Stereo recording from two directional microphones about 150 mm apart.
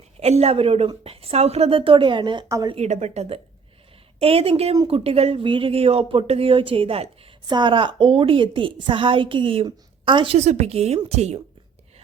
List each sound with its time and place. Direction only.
0.2 s speech: 45° right (ahead or behind); by 2.7 s 25° right (ahead or behind)
2.7 s speech: 50° right (ahead or behind)